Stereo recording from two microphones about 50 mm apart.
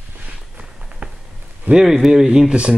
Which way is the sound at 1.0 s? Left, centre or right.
Right.